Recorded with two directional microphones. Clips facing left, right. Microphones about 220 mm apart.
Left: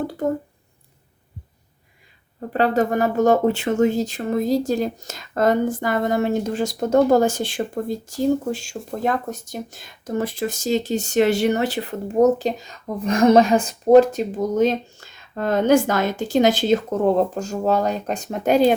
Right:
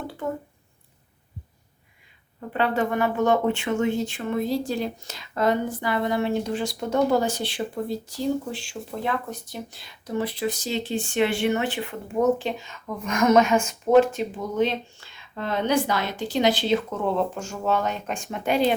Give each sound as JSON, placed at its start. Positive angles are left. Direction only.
{"t": 2.5, "sound": "speech", "side_deg": 40}